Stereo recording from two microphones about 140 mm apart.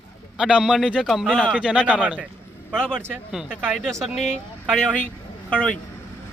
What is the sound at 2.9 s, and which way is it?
Speech, 15° right (ahead or behind).